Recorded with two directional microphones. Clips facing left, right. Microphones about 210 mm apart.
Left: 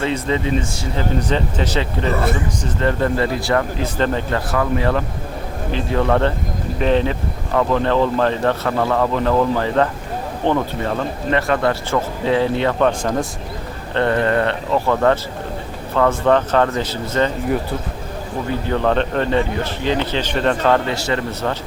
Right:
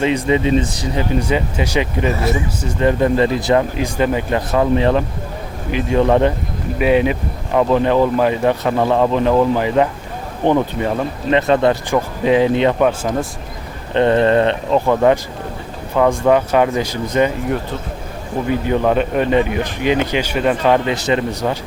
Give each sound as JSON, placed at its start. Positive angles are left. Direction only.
{"t": 0.0, "sound": "speech", "side_deg": -15}
{"t": 2.1, "sound": "speech", "side_deg": 55}
{"t": 2.6, "sound": "speech", "side_deg": -15}
{"t": 13.0, "sound": "a man's voice", "side_deg": -5}
{"t": 13.9, "sound": "speech", "side_deg": -20}
{"t": 18.4, "sound": "speech", "side_deg": -15}